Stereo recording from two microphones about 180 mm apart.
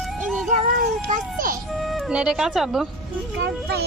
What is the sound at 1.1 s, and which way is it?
Music, 50° right (ahead or behind).